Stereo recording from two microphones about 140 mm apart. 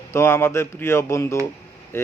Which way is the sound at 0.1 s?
20° left (ahead or behind).